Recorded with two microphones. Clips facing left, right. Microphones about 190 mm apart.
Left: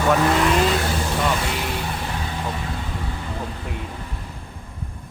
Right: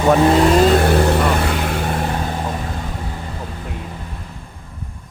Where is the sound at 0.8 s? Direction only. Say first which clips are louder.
Right 9 dB; 65° right (ahead or behind).